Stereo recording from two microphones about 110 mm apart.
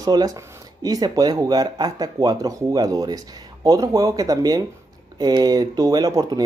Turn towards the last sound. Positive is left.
turn(degrees=-35)  # may be behind; listen again after turning